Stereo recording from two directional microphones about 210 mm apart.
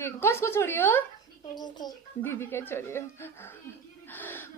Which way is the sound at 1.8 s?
10° left (ahead or behind).